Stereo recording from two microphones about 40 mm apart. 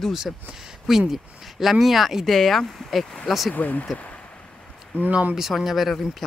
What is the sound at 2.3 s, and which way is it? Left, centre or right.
Speech, centre.